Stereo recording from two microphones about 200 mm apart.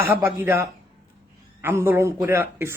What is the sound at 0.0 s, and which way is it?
A man's voice, 10° right (ahead or behind).